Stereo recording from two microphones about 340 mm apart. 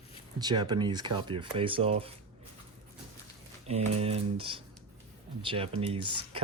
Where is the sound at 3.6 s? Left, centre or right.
Centre.